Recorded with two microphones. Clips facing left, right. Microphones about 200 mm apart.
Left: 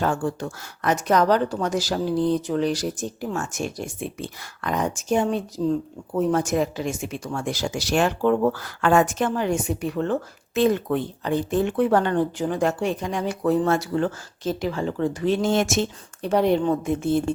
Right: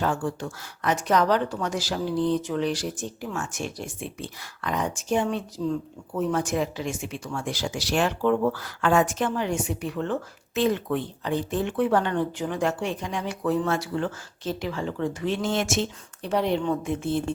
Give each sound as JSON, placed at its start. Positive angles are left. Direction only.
{"t": 0.0, "sound": "speech", "side_deg": 45}